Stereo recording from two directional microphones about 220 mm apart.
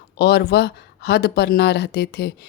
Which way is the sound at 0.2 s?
50° left (ahead or behind).